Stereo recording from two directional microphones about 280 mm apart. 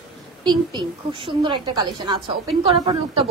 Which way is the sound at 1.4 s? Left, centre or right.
Centre.